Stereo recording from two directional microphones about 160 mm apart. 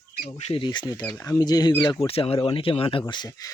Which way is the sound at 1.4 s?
25° left (ahead or behind).